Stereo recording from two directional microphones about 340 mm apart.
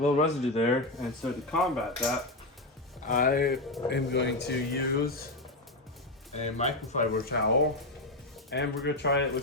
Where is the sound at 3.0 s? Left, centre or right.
Left.